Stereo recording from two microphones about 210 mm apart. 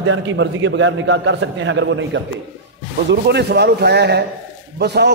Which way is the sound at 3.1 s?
50° right (ahead or behind).